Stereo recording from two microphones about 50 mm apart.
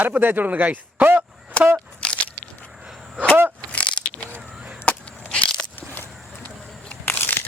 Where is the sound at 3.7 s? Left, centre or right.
Left.